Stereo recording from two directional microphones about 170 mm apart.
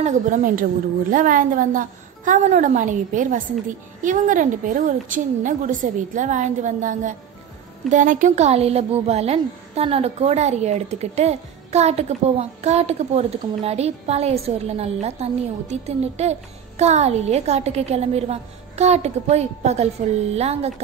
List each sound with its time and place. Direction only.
0.0 s a woman's voice: 45° right (ahead or behind)